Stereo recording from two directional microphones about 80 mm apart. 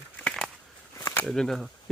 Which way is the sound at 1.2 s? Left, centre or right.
Centre.